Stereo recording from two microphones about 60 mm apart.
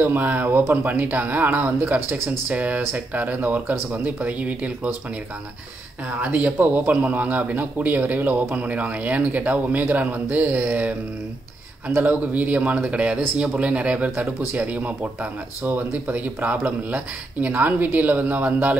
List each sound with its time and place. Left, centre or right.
0.0 s a man's voice: right
6.2 s a man's voice: right